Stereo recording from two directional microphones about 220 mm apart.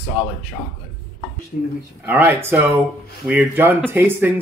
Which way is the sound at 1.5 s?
40° left (ahead or behind).